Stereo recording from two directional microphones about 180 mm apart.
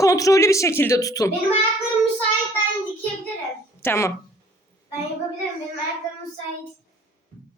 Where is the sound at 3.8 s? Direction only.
15° left (ahead or behind).